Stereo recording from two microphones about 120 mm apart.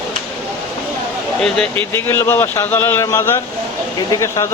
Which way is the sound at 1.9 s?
20° left (ahead or behind).